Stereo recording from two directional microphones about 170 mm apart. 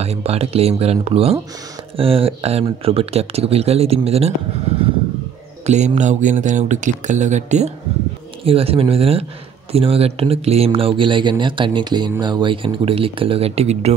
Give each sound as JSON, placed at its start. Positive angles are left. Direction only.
{"t": 0.0, "sound": "speech", "side_deg": -35}
{"t": 5.7, "sound": "speech", "side_deg": -45}